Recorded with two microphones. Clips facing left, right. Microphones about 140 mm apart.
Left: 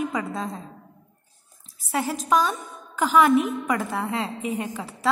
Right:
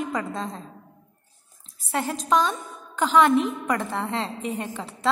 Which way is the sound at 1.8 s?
5° left (ahead or behind).